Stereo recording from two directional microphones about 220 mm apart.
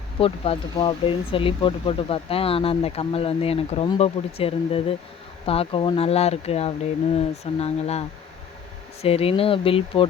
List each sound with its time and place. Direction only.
0.2 s speech: 25° left (ahead or behind)